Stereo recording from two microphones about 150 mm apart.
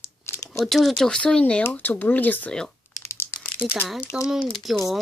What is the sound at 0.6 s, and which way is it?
Speech, centre (ahead or behind).